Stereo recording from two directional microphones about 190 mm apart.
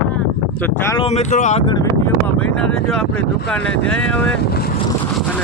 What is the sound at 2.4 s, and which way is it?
Speech, 5° left (ahead or behind).